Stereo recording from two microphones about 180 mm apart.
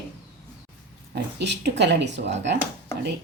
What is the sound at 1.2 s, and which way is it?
A woman's voice, 70° right (ahead or behind).